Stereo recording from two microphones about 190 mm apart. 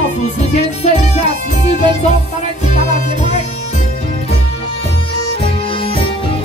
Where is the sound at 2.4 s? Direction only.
35° left (ahead or behind).